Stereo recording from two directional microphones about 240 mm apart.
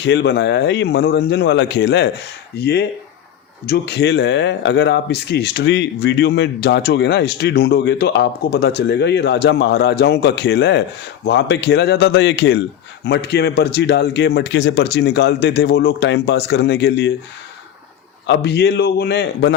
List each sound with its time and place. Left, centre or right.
0.0 s speech: left
18.3 s speech: left